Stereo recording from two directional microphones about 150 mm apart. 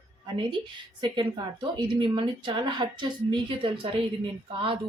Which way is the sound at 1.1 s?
30° right (ahead or behind).